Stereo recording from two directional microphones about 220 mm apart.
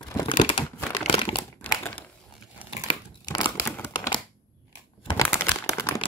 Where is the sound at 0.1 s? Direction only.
20° left (ahead or behind).